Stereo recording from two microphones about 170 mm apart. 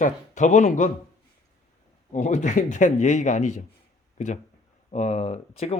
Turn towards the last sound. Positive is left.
turn(degrees=40)  # may be behind; listen again after turning